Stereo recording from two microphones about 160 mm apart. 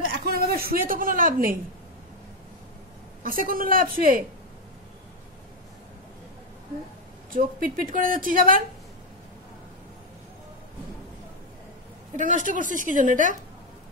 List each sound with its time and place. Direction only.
0.2 s a woman's voice: 75° right (ahead or behind)
3.3 s a woman's voice: 65° right (ahead or behind)
7.3 s a woman's voice: 60° right (ahead or behind)
12.2 s a woman's voice: 55° right (ahead or behind)